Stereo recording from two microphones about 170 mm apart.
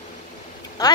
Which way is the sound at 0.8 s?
20° left (ahead or behind).